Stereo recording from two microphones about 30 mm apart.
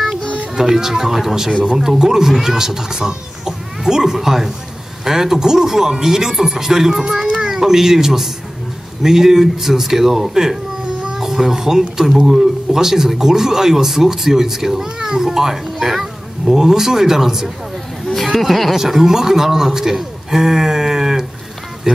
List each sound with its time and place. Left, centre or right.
0.7 s speech: centre
18.0 s chatter: centre
18.7 s speech: centre